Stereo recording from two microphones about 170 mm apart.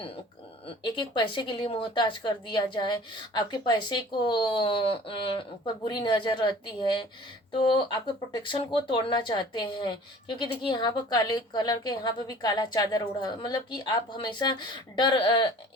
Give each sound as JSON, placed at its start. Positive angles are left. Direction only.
{"t": 0.8, "sound": "speech", "side_deg": 30}
{"t": 7.6, "sound": "speech", "side_deg": 30}